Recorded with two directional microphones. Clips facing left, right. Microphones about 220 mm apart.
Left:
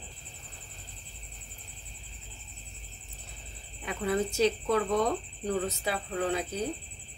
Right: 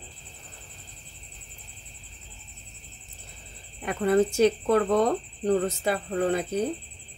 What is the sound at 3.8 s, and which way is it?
Speech, 55° right (ahead or behind).